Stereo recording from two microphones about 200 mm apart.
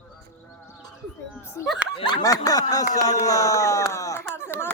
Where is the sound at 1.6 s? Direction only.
15° left (ahead or behind).